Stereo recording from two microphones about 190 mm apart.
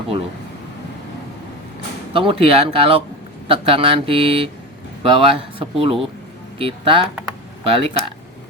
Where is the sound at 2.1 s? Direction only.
30° right (ahead or behind).